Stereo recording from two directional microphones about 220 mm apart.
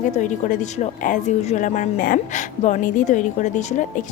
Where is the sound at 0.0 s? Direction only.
35° left (ahead or behind).